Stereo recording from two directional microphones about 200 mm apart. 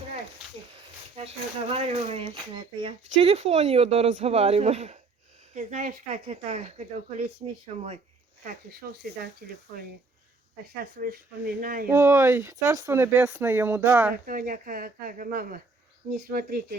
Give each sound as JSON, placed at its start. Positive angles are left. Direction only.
{"t": 0.7, "sound": "speech", "side_deg": -30}
{"t": 8.8, "sound": "speech", "side_deg": -45}
{"t": 10.8, "sound": "speech", "side_deg": -45}
{"t": 11.9, "sound": "speech", "side_deg": -15}
{"t": 14.3, "sound": "speech", "side_deg": -45}